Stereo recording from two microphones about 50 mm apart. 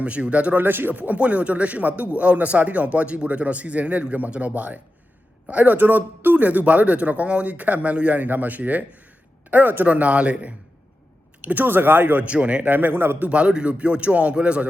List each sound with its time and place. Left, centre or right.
0.0 s speech: right
0.6 s a man's voice: right
12.2 s speech: right
12.7 s a man's voice: right
13.2 s speech: right